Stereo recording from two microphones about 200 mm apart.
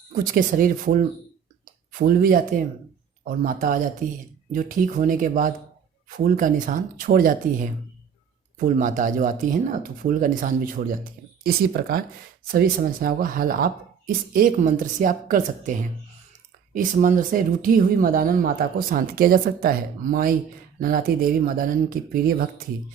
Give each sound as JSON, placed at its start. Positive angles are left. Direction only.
{"t": 0.1, "sound": "speech", "side_deg": -45}